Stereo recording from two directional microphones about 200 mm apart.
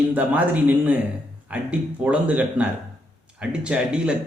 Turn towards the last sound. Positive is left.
turn(degrees=-5)  # may be behind; listen again after turning